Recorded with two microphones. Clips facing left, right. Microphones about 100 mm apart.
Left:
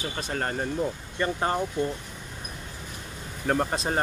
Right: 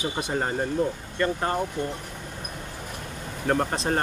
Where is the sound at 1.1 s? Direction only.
15° left (ahead or behind).